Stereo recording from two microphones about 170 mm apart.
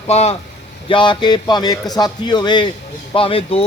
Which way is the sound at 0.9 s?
30° left (ahead or behind).